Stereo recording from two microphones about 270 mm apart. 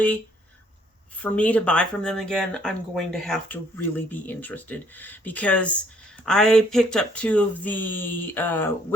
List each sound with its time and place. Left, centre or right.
1.2 s speech: centre